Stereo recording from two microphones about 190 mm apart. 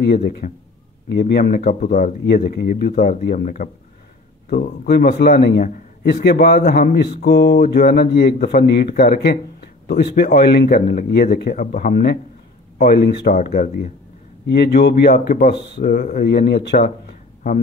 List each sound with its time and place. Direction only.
0.0 s a man's voice: 55° left (ahead or behind)